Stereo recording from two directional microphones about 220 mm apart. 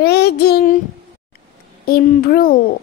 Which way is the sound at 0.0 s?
45° left (ahead or behind).